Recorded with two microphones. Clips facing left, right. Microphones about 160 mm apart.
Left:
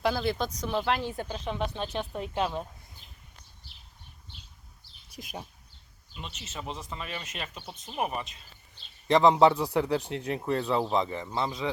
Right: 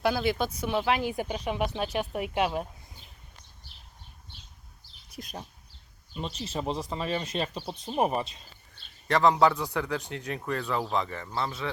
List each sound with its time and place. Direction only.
0.0 s speech: 5° right (ahead or behind)
5.2 s speech: 5° left (ahead or behind)
6.1 s speech: 35° right (ahead or behind)
9.0 s speech: 25° left (ahead or behind)